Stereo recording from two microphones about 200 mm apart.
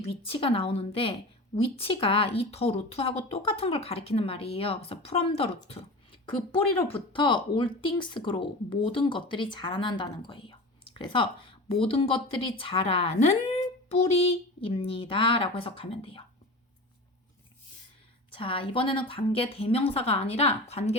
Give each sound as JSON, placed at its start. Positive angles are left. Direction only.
{"t": 0.0, "sound": "speech", "side_deg": 30}
{"t": 18.3, "sound": "speech", "side_deg": 25}